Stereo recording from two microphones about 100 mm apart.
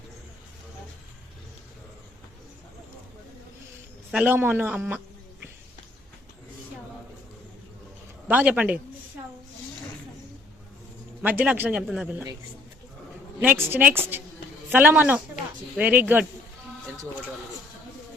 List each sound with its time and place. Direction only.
4.3 s a woman's voice: 20° right (ahead or behind)
8.3 s a man's voice: 15° right (ahead or behind)
11.2 s a man's voice: 15° right (ahead or behind)
11.8 s speech: 5° right (ahead or behind)
13.4 s a woman's voice: 20° right (ahead or behind)